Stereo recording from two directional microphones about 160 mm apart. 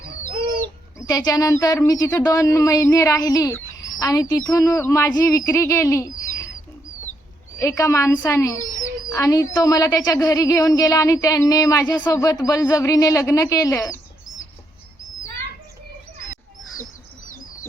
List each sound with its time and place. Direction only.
0.9 s a woman's voice: 20° left (ahead or behind)
7.6 s a woman's voice: 20° left (ahead or behind)